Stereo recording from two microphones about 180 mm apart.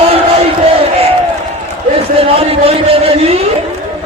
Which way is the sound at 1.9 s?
35° right (ahead or behind).